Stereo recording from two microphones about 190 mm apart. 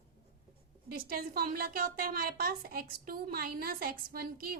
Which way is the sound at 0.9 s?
50° right (ahead or behind).